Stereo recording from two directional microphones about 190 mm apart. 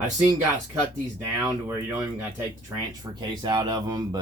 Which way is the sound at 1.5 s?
15° right (ahead or behind).